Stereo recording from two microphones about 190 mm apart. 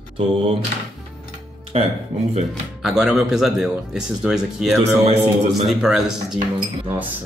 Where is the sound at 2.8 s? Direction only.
5° right (ahead or behind).